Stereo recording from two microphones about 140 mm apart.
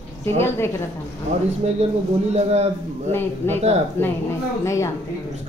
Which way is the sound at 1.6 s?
45° right (ahead or behind).